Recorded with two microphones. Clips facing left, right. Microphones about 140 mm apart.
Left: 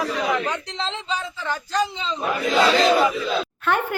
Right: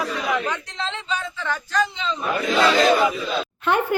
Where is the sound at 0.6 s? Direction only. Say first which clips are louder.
Left 1 dB; 30° left (ahead or behind).